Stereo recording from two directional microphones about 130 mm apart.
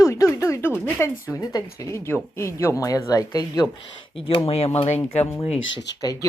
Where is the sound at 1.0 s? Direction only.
20° left (ahead or behind).